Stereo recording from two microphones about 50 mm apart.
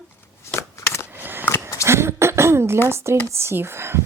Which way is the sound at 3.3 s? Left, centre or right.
Right.